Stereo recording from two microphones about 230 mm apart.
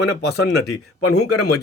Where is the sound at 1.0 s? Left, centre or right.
Left.